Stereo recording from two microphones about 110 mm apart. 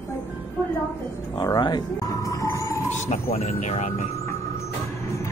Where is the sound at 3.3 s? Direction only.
80° left.